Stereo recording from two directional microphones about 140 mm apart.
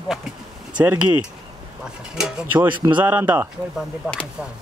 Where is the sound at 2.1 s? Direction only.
10° right (ahead or behind).